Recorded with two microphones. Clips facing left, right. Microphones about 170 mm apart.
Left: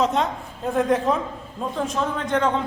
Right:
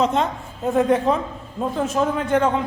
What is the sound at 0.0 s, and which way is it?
A man's voice, centre (ahead or behind).